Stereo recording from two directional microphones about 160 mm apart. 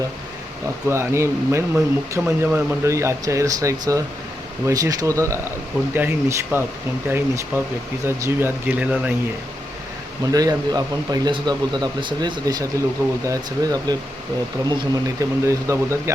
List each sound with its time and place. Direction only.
0.9 s speech: 15° right (ahead or behind)
10.3 s speech: 25° right (ahead or behind)